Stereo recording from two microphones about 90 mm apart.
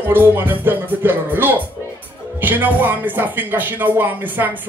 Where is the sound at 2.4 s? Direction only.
20° right (ahead or behind).